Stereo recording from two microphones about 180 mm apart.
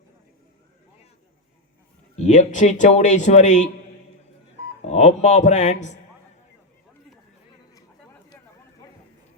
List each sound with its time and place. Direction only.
2.1 s speech: 40° left (ahead or behind)
4.9 s a man's voice: 40° left (ahead or behind)